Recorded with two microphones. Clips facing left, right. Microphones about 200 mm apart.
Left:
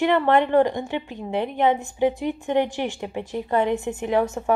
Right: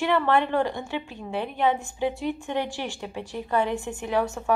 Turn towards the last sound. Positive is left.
turn(degrees=20)  # may be behind; listen again after turning